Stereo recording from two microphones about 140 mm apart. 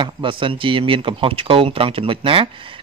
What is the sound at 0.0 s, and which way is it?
Speech, 35° right (ahead or behind).